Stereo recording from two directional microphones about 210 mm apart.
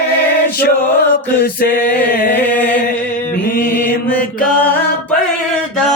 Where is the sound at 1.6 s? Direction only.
45° left (ahead or behind).